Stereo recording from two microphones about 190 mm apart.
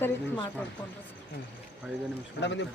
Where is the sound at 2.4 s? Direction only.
70° left (ahead or behind).